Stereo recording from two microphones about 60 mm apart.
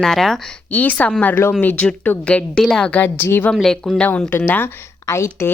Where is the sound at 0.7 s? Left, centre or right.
Left.